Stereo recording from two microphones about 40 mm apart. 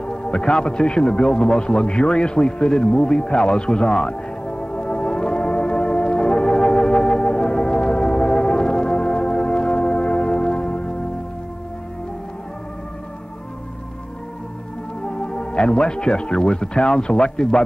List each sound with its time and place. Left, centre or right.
0.0 s music: left
15.0 s speech: left